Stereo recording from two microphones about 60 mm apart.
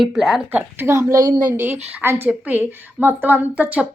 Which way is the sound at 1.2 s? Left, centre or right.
Right.